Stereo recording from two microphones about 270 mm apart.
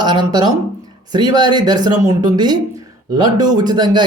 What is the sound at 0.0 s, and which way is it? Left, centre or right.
A man's voice, centre.